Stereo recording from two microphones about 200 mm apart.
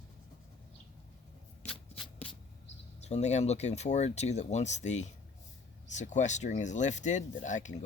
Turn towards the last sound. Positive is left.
turn(degrees=40)  # may be behind; listen again after turning